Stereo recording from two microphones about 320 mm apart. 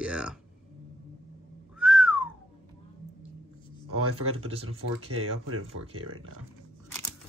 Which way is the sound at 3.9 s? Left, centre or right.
Right.